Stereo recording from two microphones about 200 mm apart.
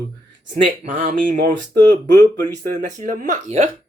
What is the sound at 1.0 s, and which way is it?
Mantra, 40° right (ahead or behind).